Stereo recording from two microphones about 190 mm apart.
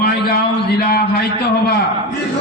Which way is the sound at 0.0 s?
60° left (ahead or behind).